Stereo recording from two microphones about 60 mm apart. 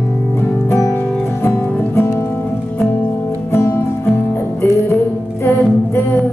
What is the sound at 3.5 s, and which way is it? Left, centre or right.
Music, left.